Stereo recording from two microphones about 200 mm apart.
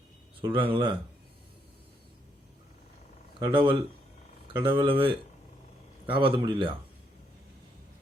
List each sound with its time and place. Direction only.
0.5 s a man's voice: 25° right (ahead or behind)
3.4 s a man's voice: 25° right (ahead or behind)